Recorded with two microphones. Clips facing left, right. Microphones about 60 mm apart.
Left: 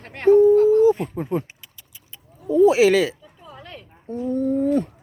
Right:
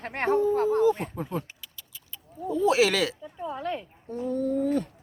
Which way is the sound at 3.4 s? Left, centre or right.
Right.